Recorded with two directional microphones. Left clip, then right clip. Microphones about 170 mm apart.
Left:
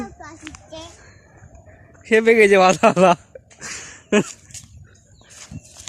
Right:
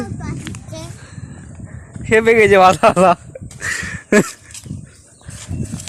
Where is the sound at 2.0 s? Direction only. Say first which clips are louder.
Right 2 dB; 15° left (ahead or behind).